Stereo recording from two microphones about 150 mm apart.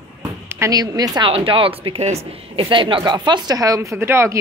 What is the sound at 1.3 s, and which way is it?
Speech, 35° right (ahead or behind).